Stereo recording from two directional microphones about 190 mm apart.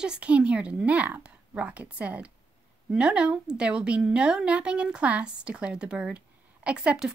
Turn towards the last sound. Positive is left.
turn(degrees=-5)  # may be behind; listen again after turning